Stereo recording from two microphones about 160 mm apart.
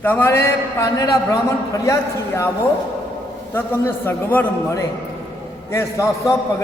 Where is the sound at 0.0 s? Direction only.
15° left (ahead or behind).